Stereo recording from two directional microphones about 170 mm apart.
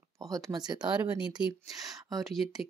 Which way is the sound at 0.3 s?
25° right (ahead or behind).